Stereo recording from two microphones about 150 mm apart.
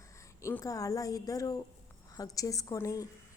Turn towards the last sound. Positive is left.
turn(degrees=20)  # may be behind; listen again after turning